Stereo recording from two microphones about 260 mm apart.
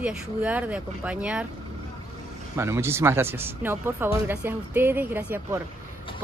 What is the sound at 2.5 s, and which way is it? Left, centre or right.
Speech, centre.